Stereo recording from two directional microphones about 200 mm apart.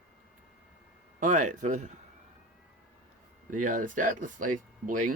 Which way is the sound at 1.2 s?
40° right (ahead or behind).